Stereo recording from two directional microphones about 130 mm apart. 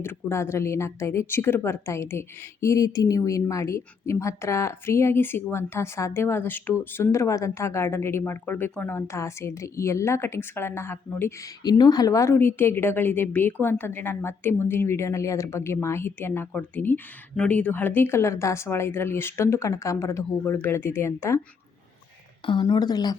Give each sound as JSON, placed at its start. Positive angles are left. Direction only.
{"t": 0.0, "sound": "a woman's voice", "side_deg": 20}
{"t": 11.6, "sound": "a woman's voice", "side_deg": 30}
{"t": 22.6, "sound": "speech", "side_deg": 30}